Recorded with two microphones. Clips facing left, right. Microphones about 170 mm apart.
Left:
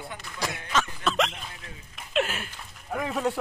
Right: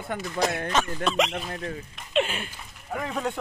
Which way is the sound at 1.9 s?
Centre (ahead or behind).